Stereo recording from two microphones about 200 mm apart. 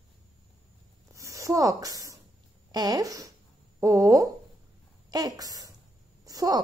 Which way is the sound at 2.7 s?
20° right (ahead or behind).